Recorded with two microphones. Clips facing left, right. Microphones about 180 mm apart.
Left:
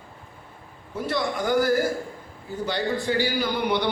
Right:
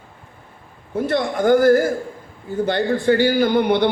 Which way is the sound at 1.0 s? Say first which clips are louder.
Right 7 dB; 50° right (ahead or behind).